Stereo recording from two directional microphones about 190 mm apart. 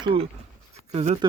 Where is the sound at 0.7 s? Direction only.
35° right (ahead or behind).